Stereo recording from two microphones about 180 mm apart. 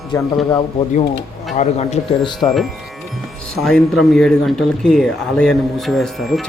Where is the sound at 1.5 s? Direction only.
35° left (ahead or behind).